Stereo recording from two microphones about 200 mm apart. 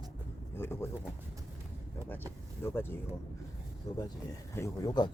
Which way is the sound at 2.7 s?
10° left (ahead or behind).